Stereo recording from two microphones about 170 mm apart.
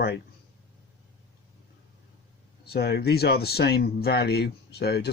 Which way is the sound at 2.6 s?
70° left (ahead or behind).